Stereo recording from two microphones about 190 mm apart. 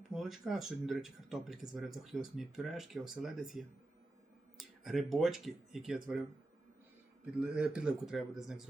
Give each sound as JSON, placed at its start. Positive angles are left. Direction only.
{"t": 0.1, "sound": "speech", "side_deg": 0}
{"t": 4.8, "sound": "speech", "side_deg": 0}
{"t": 7.3, "sound": "speech", "side_deg": -5}